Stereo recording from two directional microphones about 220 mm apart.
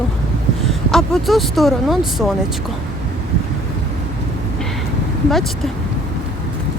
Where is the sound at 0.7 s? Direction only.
Centre (ahead or behind).